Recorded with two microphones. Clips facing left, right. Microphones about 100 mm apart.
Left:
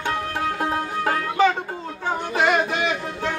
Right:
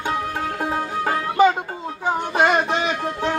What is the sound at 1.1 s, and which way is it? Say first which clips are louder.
Music: right 3 dB; 15° right (ahead or behind).